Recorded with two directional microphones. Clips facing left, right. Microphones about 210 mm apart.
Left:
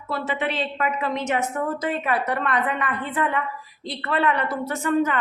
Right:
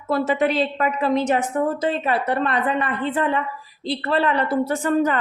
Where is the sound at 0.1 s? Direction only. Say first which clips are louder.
Right 7 dB; 45° right (ahead or behind).